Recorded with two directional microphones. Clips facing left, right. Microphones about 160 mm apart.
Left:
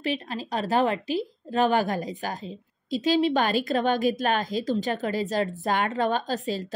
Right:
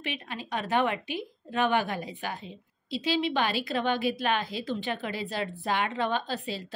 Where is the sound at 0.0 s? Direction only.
35° left (ahead or behind).